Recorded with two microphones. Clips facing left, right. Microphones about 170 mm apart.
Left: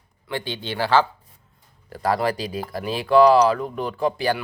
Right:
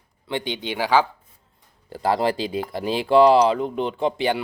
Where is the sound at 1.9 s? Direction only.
25° right (ahead or behind).